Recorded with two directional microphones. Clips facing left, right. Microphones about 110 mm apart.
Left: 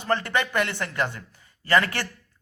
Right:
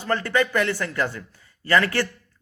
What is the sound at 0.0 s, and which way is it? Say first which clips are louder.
A man's voice: right 2 dB; 20° left (ahead or behind).